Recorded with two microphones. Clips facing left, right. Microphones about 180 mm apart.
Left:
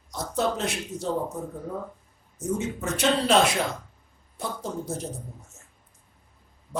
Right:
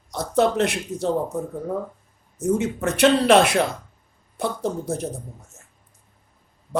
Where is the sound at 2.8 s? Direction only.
65° right (ahead or behind).